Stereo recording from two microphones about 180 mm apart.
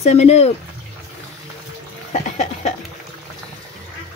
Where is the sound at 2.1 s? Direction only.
40° left (ahead or behind).